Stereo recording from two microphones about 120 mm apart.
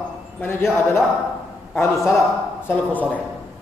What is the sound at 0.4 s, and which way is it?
Speech, 20° left (ahead or behind).